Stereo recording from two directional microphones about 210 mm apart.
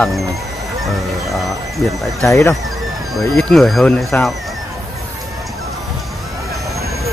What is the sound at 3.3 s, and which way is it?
Speech, centre (ahead or behind).